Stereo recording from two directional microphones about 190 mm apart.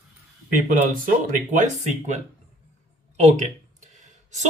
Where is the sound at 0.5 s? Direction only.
45° right (ahead or behind).